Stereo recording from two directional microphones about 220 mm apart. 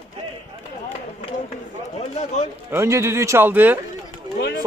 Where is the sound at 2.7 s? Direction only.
15° right (ahead or behind).